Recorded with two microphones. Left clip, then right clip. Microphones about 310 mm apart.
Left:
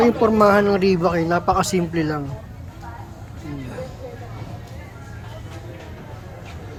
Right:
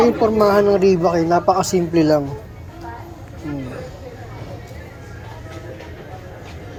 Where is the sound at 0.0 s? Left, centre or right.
Centre.